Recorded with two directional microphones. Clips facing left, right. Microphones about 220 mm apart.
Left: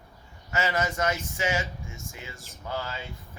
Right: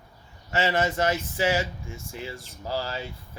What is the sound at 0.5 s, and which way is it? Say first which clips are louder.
Speech: right 3 dB; 30° right (ahead or behind).